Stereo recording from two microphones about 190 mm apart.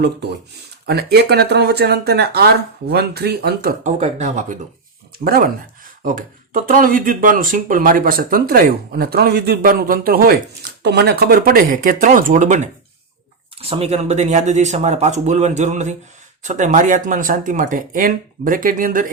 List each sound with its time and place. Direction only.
0.9 s speech: 55° right (ahead or behind)
4.0 s speech: 40° right (ahead or behind)
5.2 s speech: 55° right (ahead or behind)